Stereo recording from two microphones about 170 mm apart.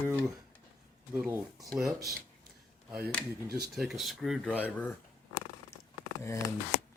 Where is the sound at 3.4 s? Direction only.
65° right (ahead or behind).